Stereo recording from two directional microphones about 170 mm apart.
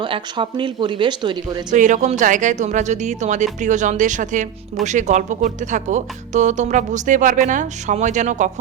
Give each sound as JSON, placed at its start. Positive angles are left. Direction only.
{"t": 0.0, "sound": "speech", "side_deg": -30}
{"t": 1.7, "sound": "speech", "side_deg": -45}